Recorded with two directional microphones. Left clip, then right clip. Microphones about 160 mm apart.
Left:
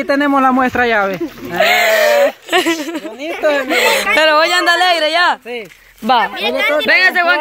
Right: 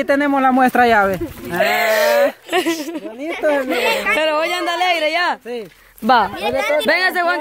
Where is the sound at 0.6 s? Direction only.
75° right (ahead or behind).